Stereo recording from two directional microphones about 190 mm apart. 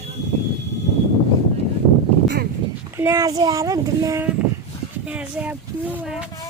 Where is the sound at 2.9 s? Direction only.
15° right (ahead or behind).